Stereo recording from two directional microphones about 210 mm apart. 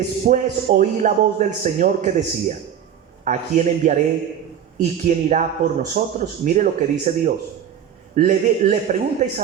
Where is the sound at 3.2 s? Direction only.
35° right (ahead or behind).